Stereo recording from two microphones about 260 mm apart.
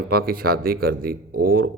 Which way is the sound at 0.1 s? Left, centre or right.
Right.